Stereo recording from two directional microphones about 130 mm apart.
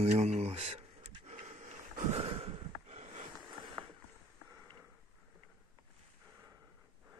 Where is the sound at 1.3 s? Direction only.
55° right (ahead or behind).